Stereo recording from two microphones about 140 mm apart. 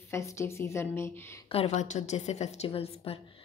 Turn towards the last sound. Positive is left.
turn(degrees=45)  # may be behind; listen again after turning